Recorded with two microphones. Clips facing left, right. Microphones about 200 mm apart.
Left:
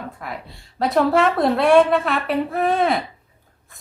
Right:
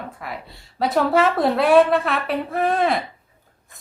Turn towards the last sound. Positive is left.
turn(degrees=0)  # may be behind; listen again after turning